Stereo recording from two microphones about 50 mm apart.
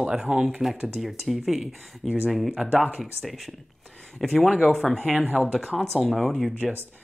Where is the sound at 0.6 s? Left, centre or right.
Centre.